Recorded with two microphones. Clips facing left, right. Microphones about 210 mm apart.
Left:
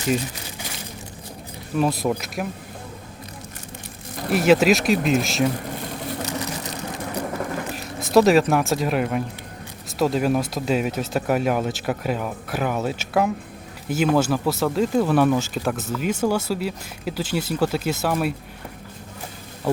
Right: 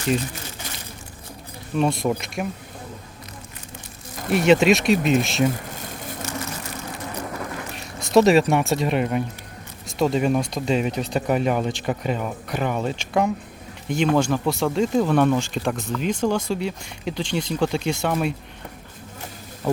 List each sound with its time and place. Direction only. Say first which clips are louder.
1.7 s speech: even; centre (ahead or behind)
4.3 s speech: even; centre (ahead or behind)
6.2 s vehicle: left 2 dB; 15° left (ahead or behind)
7.8 s speech: even; centre (ahead or behind)